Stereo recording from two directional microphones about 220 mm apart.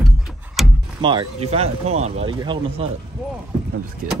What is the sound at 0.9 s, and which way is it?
Speech, 20° right (ahead or behind).